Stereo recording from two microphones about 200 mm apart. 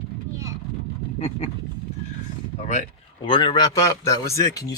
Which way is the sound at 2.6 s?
35° left (ahead or behind).